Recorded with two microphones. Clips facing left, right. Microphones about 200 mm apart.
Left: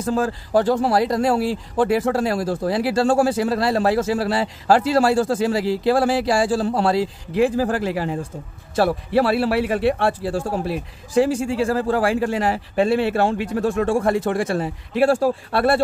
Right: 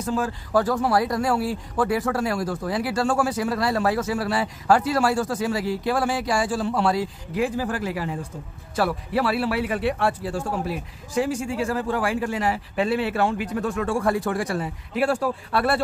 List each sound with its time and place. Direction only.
0.1 s a man's voice: 35° left (ahead or behind)
11.6 s a man's voice: 35° left (ahead or behind)